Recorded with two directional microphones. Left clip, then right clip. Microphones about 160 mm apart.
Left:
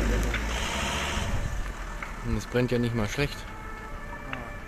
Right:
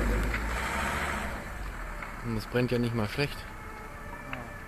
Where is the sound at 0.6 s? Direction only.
35° left (ahead or behind).